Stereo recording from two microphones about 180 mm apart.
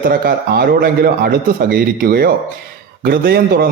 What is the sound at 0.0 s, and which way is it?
A man's voice, 55° right (ahead or behind).